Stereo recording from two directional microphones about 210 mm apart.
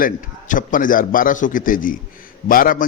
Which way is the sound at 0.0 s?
40° left (ahead or behind).